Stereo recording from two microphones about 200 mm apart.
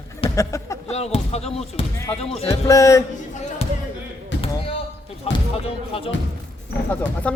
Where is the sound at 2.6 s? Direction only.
15° left (ahead or behind).